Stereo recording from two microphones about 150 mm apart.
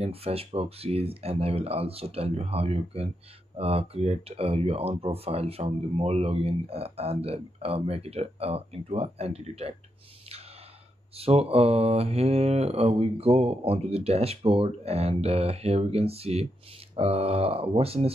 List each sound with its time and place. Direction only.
0.0 s speech: 40° right (ahead or behind)
11.1 s mantra: 40° right (ahead or behind)
16.9 s speech: 40° right (ahead or behind)